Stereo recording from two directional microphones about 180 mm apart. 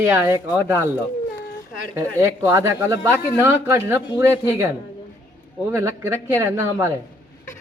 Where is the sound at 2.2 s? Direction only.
15° right (ahead or behind).